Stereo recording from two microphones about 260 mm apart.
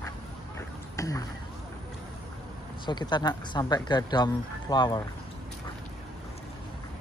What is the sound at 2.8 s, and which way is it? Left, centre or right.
Speech, centre.